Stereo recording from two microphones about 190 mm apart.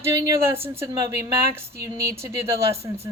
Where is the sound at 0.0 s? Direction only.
15° right (ahead or behind).